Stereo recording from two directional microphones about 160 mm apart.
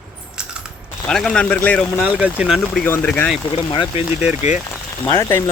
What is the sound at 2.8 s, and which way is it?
Speech, 10° left (ahead or behind).